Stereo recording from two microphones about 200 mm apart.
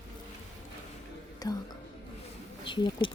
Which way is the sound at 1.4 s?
20° left (ahead or behind).